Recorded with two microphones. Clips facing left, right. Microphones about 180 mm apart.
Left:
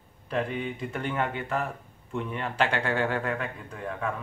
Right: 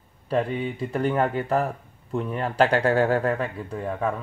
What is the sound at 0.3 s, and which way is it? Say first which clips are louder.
Speech: right 5 dB; 35° right (ahead or behind).